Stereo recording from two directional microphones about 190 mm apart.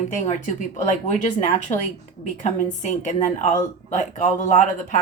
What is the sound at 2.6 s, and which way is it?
Speech, 40° left (ahead or behind).